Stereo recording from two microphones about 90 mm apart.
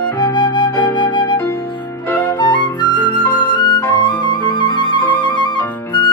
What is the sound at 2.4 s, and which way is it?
Flute, 55° left (ahead or behind).